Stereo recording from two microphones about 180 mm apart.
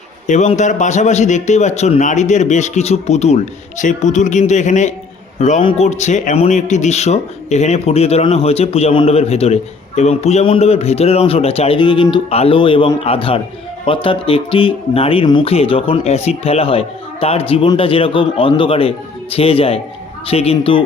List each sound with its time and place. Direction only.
0.3 s speech: 40° left (ahead or behind)